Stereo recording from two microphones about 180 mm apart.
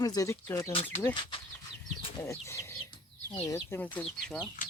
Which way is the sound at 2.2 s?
15° left (ahead or behind).